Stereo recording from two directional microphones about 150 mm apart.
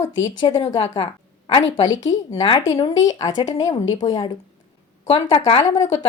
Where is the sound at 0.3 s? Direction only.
30° left (ahead or behind).